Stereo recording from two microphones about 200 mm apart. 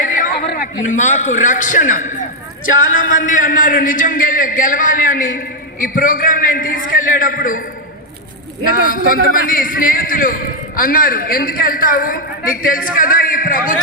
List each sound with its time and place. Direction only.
0.0 s a man's voice: 40° left (ahead or behind)
8.6 s a man's voice: 45° left (ahead or behind)